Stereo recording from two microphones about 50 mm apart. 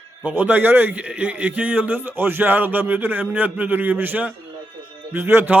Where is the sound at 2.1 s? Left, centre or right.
Right.